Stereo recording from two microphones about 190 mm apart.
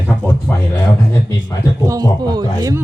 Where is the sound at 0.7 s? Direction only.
20° left (ahead or behind).